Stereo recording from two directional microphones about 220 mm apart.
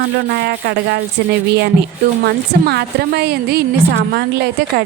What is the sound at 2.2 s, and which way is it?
A woman's voice, 45° right (ahead or behind).